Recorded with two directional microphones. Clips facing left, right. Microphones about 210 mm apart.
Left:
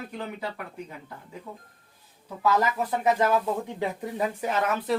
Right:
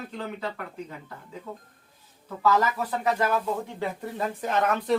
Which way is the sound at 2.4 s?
15° left (ahead or behind).